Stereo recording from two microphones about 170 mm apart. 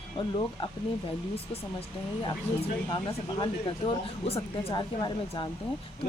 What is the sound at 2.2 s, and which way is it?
Speech, 30° left (ahead or behind).